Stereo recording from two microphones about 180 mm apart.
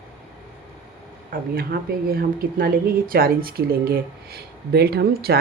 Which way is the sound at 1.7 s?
60° right (ahead or behind).